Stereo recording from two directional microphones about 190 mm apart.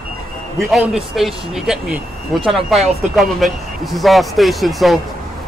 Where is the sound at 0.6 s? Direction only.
Centre (ahead or behind).